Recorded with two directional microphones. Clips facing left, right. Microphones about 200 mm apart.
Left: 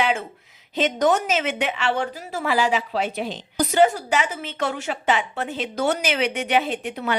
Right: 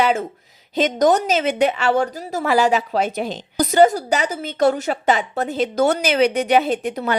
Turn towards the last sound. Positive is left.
turn(degrees=-40)  # may be behind; listen again after turning